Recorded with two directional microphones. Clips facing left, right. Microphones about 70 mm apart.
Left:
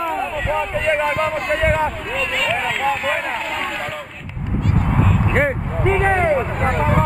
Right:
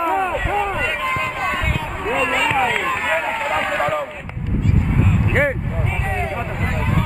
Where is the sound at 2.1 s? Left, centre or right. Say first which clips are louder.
Right 3 dB; right.